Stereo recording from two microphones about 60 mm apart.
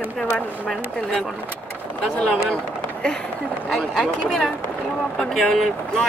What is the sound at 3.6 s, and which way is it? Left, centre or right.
Speech, centre.